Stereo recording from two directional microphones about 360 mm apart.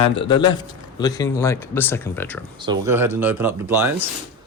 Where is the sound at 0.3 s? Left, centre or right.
Centre.